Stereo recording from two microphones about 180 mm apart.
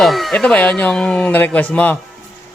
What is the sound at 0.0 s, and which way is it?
Speech, centre (ahead or behind).